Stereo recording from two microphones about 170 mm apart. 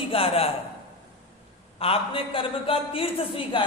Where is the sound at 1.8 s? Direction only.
35° left (ahead or behind).